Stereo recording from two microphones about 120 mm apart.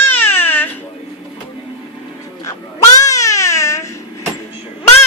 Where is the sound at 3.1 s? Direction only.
25° left (ahead or behind).